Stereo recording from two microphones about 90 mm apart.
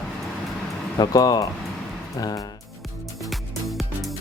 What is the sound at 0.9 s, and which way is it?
Speech, 45° left (ahead or behind).